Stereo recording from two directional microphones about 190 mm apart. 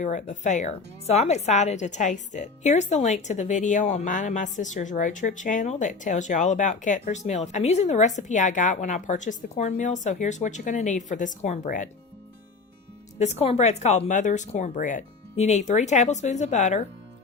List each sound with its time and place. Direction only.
0.0 s speech: 40° left (ahead or behind)
13.1 s speech: 35° left (ahead or behind)